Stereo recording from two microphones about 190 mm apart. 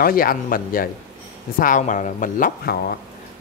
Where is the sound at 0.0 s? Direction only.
50° left (ahead or behind).